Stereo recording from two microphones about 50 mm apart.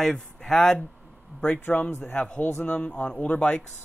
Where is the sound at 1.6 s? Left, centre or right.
Left.